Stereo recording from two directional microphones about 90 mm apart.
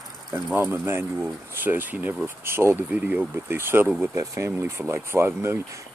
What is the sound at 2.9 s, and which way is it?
Speech, 15° right (ahead or behind).